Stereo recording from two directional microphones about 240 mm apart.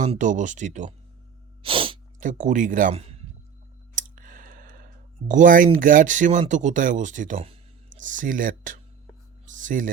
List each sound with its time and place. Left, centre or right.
0.0 s speech: right
3.9 s a sound: right
5.3 s speech: right